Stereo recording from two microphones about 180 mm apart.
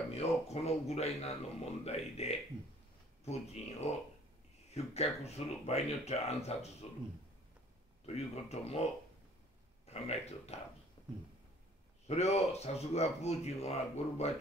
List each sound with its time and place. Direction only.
0.1 s speech: 35° left (ahead or behind)
3.6 s speech: 35° left (ahead or behind)
8.0 s speech: 35° left (ahead or behind)
9.8 s speech: 35° left (ahead or behind)
11.0 s a sound: 25° left (ahead or behind)
12.1 s speech: 35° left (ahead or behind)